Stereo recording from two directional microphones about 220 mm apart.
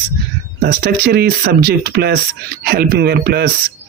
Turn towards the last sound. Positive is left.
turn(degrees=-45)  # may be behind; listen again after turning